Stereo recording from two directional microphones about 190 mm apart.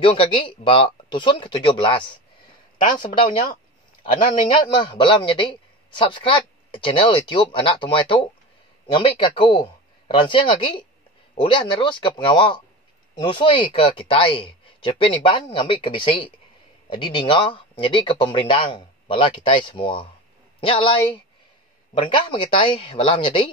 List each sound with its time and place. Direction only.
0.0 s a man's voice: 25° left (ahead or behind)
3.2 s a man's voice: 25° left (ahead or behind)